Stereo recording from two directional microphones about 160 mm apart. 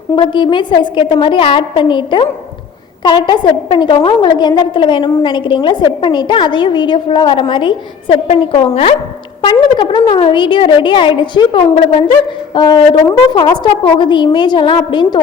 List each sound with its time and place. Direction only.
0.2 s a woman's voice: 30° left (ahead or behind)